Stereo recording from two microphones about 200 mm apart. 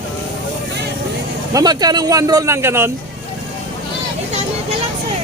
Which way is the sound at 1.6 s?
20° right (ahead or behind).